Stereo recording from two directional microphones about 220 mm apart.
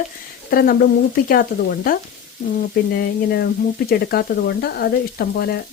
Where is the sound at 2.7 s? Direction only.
45° left (ahead or behind).